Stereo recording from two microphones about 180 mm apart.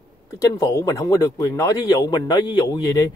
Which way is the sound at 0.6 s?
20° left (ahead or behind).